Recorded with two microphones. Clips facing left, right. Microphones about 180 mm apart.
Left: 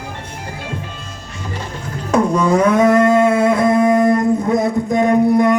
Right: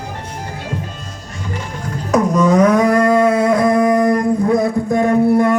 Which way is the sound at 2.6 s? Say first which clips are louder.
Left 2 dB; 25° left (ahead or behind).